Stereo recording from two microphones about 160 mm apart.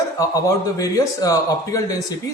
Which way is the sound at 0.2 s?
20° left (ahead or behind).